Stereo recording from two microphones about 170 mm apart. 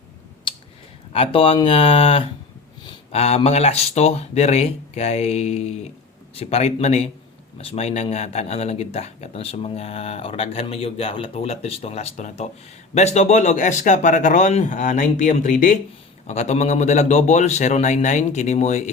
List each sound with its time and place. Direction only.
0.5 s a sound: 30° left (ahead or behind)
1.1 s speech: 35° left (ahead or behind); by 15.8 s 50° left (ahead or behind)
16.2 s speech: 40° left (ahead or behind)